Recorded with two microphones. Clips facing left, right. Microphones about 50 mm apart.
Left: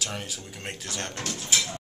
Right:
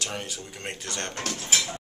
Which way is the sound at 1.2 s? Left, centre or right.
Right.